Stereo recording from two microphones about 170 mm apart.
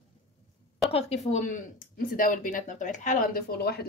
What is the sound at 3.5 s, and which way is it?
Speech, 70° left (ahead or behind).